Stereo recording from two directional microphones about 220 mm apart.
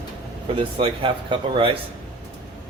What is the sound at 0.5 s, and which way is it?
Speech, 25° right (ahead or behind).